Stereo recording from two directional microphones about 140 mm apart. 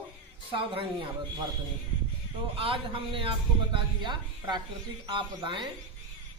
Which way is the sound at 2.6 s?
40° right (ahead or behind).